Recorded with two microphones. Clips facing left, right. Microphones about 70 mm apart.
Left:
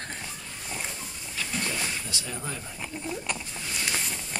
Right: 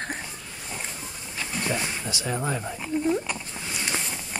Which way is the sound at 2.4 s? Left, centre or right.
Right.